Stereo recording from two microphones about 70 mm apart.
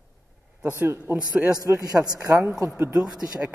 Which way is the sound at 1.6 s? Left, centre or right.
Right.